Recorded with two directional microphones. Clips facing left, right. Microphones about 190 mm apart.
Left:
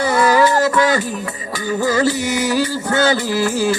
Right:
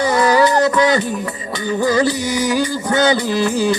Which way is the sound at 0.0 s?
15° right (ahead or behind).